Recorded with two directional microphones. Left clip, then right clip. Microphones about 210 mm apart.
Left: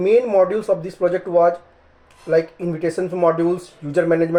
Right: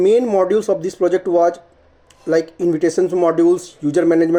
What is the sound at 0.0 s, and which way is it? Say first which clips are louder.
Speech: right 1 dB; 45° right (ahead or behind).